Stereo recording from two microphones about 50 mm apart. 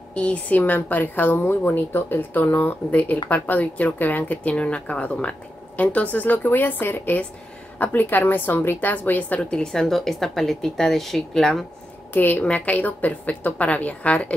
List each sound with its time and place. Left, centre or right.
0.1 s a woman's voice: left
4.6 s a woman's voice: left
9.4 s speech: centre
12.1 s a woman's voice: left
12.4 s a woman's voice: left